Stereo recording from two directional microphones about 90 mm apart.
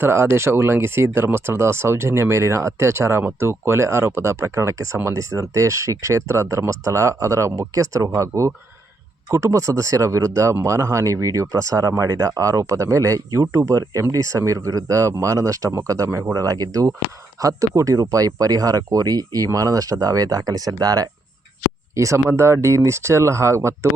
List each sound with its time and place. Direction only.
0.0 s speech: 30° right (ahead or behind)